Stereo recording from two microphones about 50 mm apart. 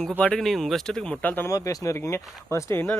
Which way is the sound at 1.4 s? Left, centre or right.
Left.